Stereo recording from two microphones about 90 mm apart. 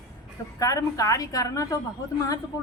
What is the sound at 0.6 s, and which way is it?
A woman's voice, 40° left (ahead or behind).